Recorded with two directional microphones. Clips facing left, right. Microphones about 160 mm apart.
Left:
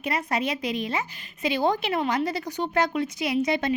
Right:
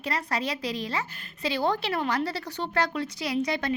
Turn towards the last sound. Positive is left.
turn(degrees=20)  # may be behind; listen again after turning